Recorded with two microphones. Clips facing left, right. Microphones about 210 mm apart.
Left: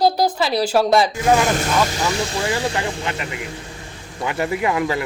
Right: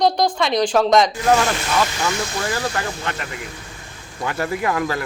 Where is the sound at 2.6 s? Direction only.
15° left (ahead or behind).